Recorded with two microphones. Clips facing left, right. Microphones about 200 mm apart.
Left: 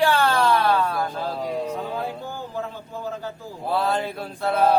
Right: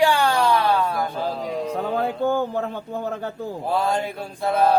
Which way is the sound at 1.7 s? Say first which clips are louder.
Right 5 dB; 60° right (ahead or behind).